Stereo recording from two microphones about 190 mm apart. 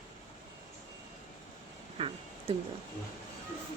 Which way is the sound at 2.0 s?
30° right (ahead or behind).